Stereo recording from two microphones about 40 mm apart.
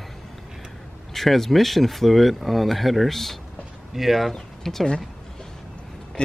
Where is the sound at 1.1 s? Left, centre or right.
Centre.